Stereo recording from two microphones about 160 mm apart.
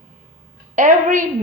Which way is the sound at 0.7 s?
50° right (ahead or behind).